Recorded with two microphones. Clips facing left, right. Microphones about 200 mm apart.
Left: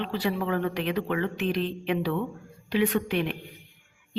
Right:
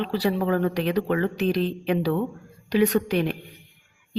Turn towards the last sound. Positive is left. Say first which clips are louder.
# right 4 dB
turn(degrees=-40)  # may be behind; listen again after turning